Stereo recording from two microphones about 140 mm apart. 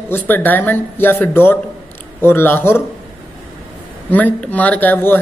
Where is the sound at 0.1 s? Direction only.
15° left (ahead or behind).